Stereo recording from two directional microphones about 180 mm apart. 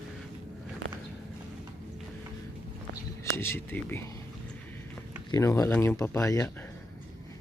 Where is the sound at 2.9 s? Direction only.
15° left (ahead or behind).